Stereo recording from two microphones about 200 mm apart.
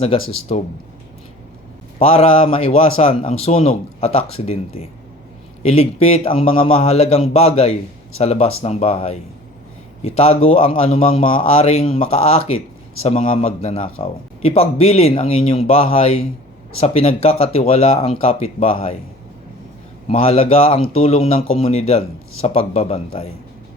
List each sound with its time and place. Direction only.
0.5 s a man's voice: 30° left (ahead or behind)
2.0 s a man's voice: 30° left (ahead or behind)
20.1 s a man's voice: 30° left (ahead or behind)